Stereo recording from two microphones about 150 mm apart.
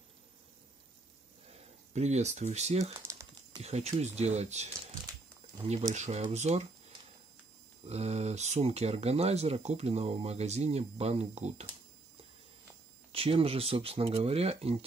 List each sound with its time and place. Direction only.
1.5 s speech: 45° right (ahead or behind)
2.8 s typing: 20° right (ahead or behind)
3.6 s speech: 45° right (ahead or behind)
5.7 s speech: 50° right (ahead or behind)
7.8 s speech: 45° right (ahead or behind)
13.1 s speech: 40° right (ahead or behind)